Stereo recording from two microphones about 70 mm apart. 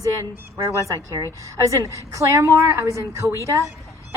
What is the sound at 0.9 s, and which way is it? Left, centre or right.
Speech, right.